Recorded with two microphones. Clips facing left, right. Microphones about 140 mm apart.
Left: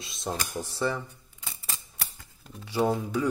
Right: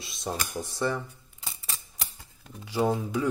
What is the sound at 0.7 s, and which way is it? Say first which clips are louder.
Speech: even; 15° right (ahead or behind).